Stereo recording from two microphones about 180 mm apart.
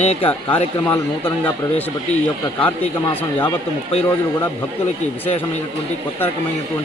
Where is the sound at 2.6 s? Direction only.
10° left (ahead or behind).